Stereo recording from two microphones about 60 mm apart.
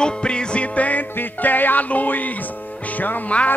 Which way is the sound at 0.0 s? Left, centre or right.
Centre.